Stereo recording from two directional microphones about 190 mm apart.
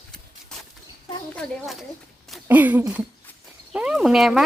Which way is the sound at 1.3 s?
5° left (ahead or behind).